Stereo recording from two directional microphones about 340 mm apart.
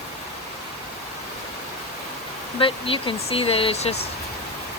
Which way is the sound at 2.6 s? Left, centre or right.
Centre.